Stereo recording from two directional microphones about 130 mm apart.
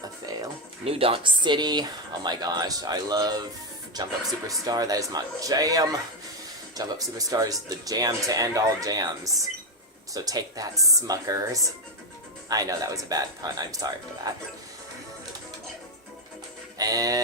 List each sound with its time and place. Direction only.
0.9 s speech: 45° right (ahead or behind); by 3.4 s 30° right (ahead or behind)
4.4 s speech: 25° right (ahead or behind)
16.7 s music: 30° right (ahead or behind)